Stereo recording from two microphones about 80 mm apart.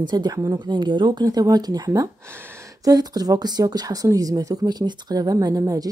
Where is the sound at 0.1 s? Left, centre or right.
Right.